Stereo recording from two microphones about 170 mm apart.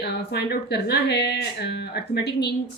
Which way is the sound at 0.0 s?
70° left (ahead or behind).